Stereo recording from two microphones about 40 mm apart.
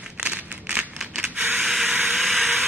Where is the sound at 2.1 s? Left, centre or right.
Centre.